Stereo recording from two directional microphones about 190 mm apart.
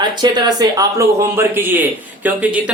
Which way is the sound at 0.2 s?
20° right (ahead or behind).